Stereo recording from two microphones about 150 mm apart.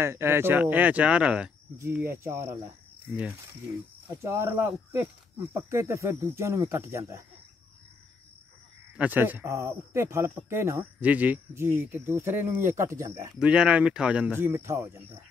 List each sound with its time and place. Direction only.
0.0 s speech: 15° right (ahead or behind)
4.1 s speech: 15° right (ahead or behind)
8.9 s speech: 10° right (ahead or behind)
13.4 s speech: 5° right (ahead or behind)